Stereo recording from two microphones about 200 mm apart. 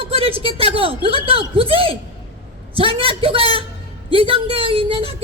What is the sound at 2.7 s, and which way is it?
Speech, 25° right (ahead or behind).